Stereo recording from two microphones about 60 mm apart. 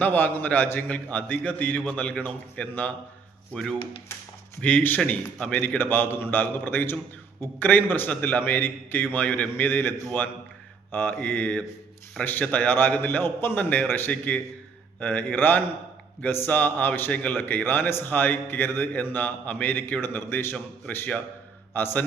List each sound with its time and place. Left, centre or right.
0.0 s a man's voice: left
4.6 s a man's voice: left
5.5 s a man's voice: left
10.9 s a man's voice: left
16.5 s a man's voice: left
21.7 s a man's voice: left